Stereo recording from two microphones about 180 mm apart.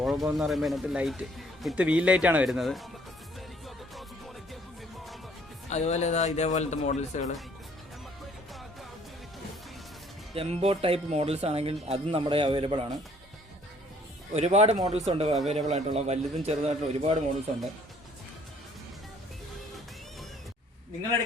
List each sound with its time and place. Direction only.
0.0 s speech: centre (ahead or behind)
5.6 s speech: 40° left (ahead or behind)
10.3 s speech: 35° right (ahead or behind)
14.3 s speech: 35° right (ahead or behind)